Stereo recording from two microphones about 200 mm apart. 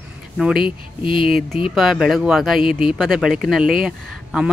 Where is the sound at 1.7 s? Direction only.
Centre (ahead or behind).